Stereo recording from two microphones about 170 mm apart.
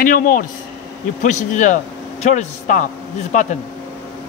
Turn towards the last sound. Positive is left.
turn(degrees=45)  # may be behind; listen again after turning